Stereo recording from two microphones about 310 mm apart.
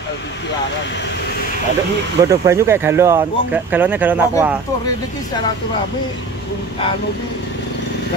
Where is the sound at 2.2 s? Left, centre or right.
Centre.